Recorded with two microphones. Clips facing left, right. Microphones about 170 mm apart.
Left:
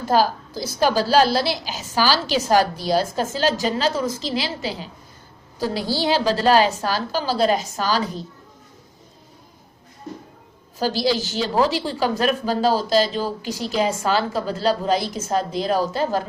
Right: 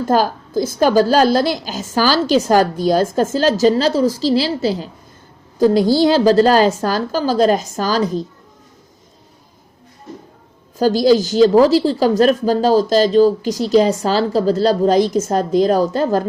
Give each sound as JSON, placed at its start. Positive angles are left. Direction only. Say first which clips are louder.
{"t": 0.1, "sound": "a woman's voice", "louder": "right 2 dB", "side_deg": -50}
{"t": 10.8, "sound": "a woman's voice", "louder": "right 9 dB", "side_deg": -45}